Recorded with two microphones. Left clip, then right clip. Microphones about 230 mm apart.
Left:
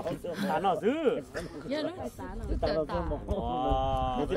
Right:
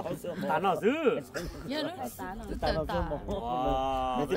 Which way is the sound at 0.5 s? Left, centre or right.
Right.